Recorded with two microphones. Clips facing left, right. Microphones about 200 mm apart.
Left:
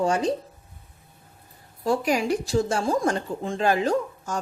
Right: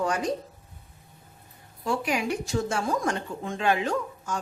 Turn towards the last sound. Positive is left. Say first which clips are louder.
# left 4 dB
turn(degrees=40)  # may be behind; listen again after turning